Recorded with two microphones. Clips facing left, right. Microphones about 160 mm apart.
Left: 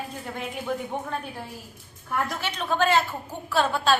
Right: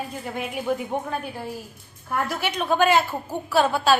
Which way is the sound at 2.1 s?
10° right (ahead or behind).